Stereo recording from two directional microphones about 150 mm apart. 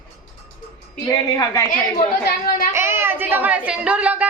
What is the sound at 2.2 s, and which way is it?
Chatter, 85° left.